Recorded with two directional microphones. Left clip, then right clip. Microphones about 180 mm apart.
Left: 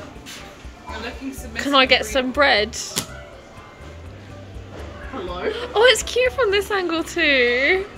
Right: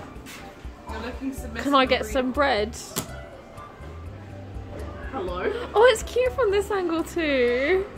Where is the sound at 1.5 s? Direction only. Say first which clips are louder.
Left 5 dB; 10° right (ahead or behind).